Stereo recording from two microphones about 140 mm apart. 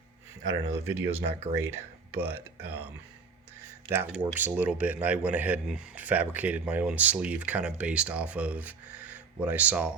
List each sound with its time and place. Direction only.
0.4 s speech: 15° right (ahead or behind)
4.1 s speech: 10° right (ahead or behind)